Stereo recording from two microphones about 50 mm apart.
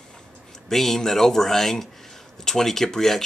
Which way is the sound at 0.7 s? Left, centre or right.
Centre.